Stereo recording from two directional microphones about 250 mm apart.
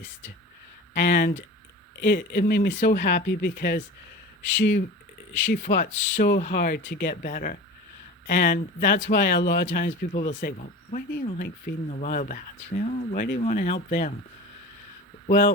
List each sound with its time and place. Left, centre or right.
0.9 s speech: left
6.4 s speech: left
10.1 s speech: left
15.3 s speech: left